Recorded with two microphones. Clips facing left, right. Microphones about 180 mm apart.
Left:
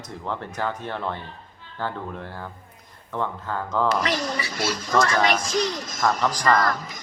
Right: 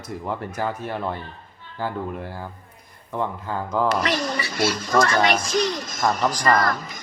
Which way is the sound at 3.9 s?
65° right (ahead or behind).